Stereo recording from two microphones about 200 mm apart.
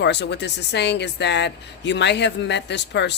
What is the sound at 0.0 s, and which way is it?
Speech, 60° left (ahead or behind).